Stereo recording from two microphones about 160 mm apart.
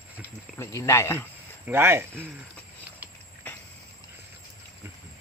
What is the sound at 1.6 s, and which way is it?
Speech, 15° right (ahead or behind).